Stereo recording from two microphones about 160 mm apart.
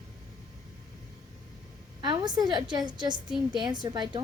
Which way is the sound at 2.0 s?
25° right (ahead or behind).